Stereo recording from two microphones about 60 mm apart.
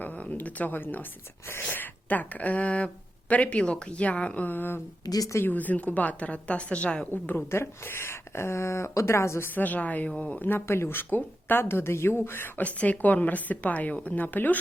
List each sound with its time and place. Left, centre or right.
0.0 s speech: left
5.0 s a woman's voice: left
5.5 s speech: left
7.1 s speech: left
9.5 s speech: left
10.7 s a woman's voice: left
12.6 s speech: left